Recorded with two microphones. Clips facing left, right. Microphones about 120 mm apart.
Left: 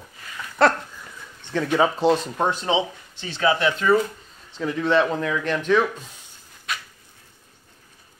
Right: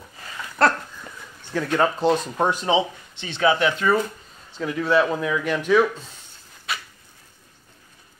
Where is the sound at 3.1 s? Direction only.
40° left (ahead or behind).